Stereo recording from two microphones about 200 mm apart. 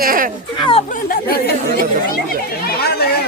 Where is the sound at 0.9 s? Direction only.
45° left (ahead or behind).